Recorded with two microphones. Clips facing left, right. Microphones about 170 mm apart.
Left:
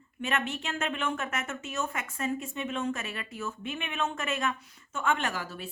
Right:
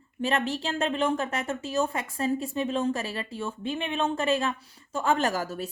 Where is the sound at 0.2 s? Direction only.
35° right (ahead or behind).